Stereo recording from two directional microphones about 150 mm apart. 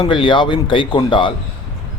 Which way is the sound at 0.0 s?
30° left (ahead or behind).